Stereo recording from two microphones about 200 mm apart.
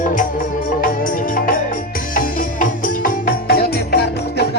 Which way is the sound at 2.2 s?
40° left (ahead or behind).